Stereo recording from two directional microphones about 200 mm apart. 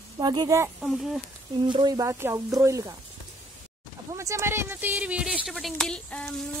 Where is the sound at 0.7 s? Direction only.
Centre (ahead or behind).